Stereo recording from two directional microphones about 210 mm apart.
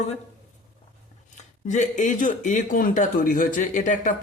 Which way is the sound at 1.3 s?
35° left (ahead or behind).